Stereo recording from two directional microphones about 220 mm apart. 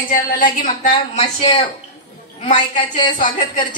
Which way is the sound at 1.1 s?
25° left (ahead or behind).